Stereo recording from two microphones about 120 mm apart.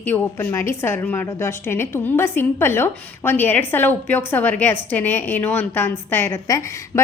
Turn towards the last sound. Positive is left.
turn(degrees=25)  # may be behind; listen again after turning